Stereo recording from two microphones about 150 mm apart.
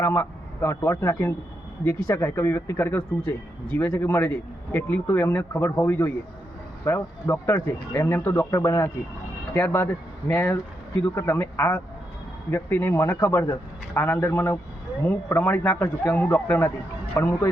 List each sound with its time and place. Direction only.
0.0 s speech: 15° left (ahead or behind)